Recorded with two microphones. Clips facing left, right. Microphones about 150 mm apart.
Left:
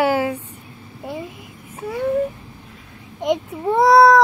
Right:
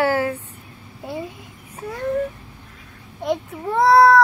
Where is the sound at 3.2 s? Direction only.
15° left (ahead or behind).